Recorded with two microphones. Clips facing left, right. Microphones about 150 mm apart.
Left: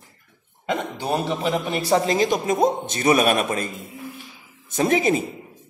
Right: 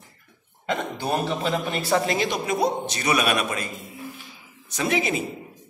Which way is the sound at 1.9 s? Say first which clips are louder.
Left 4 dB; 40° left (ahead or behind).